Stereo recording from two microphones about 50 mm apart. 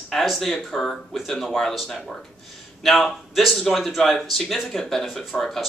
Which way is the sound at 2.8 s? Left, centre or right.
Centre.